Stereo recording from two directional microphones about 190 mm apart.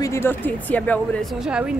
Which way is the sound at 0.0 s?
15° left (ahead or behind).